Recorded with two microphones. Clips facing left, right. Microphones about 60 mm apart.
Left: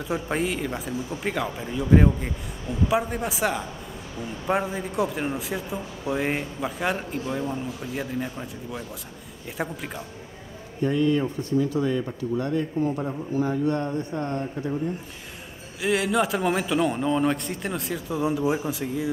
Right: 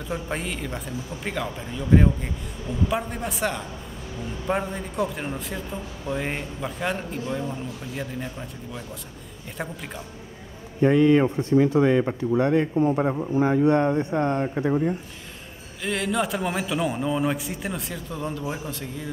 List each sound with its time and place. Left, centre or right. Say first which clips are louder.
0.1 s speech: left 4 dB; centre
10.8 s a man's voice: right 5 dB; right
14.4 s speech: right 5 dB; right
15.8 s speech: left 3 dB; centre